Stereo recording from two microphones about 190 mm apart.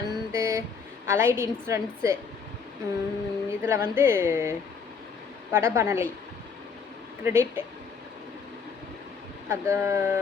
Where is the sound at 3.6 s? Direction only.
15° right (ahead or behind).